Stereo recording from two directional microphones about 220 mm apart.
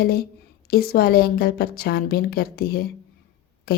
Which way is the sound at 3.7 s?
45° left (ahead or behind).